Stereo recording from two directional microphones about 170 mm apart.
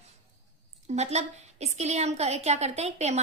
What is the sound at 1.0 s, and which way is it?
A woman's voice, 40° right (ahead or behind).